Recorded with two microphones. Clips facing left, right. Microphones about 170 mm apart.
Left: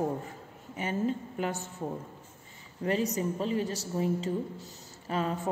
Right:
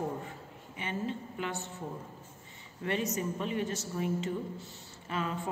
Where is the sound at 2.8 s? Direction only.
35° left (ahead or behind).